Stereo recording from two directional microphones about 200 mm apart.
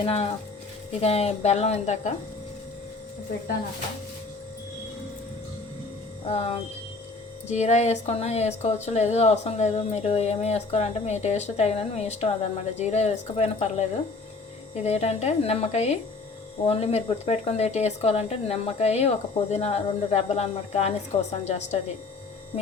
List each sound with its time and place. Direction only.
0.0 s speech: 30° left (ahead or behind)
6.2 s speech: 30° left (ahead or behind)
14.8 s speech: 30° left (ahead or behind)